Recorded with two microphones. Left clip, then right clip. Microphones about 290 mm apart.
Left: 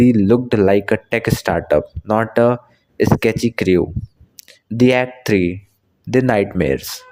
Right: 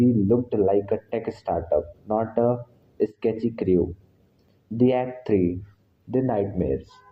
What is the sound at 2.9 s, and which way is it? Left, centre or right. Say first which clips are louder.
Speech: left 8 dB; left.